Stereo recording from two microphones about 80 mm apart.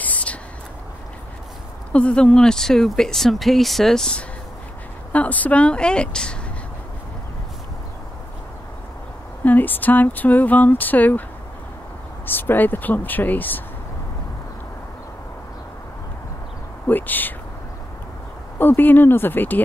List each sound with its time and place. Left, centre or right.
0.0 s a sound: centre
1.9 s speech: centre
5.1 s a woman's voice: centre
9.4 s speech: left
12.3 s speech: left
16.8 s speech: left
18.6 s speech: left